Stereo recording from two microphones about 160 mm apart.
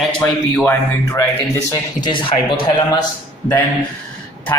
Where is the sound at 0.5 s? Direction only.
10° left (ahead or behind).